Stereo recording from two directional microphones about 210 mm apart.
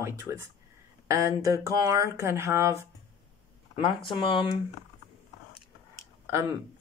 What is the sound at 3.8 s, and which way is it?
Speech, 25° left (ahead or behind).